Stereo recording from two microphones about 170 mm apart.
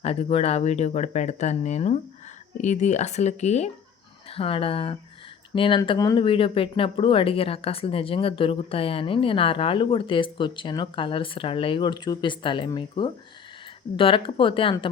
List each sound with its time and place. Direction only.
0.0 s speech: 35° left (ahead or behind)